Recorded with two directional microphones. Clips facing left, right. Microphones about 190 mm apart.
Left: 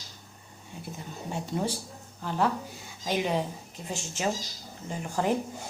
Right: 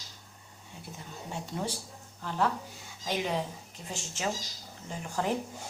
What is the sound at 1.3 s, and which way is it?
Speech, 15° left (ahead or behind).